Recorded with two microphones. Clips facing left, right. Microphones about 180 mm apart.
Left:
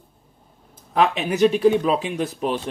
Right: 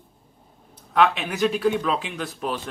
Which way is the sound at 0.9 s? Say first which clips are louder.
Left 1 dB; 35° left (ahead or behind).